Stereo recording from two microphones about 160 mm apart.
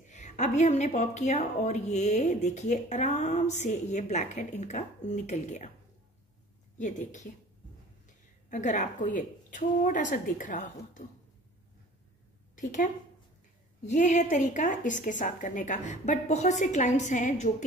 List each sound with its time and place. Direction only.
0.0 s a woman's voice: 50° left (ahead or behind)
6.8 s a woman's voice: 50° left (ahead or behind)
8.5 s a woman's voice: 50° left (ahead or behind)
12.5 s a woman's voice: 50° left (ahead or behind)